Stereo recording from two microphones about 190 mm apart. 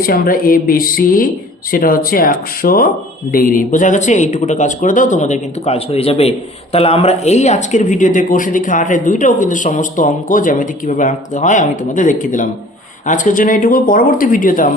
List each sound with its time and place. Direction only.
0.0 s speech: 50° left (ahead or behind)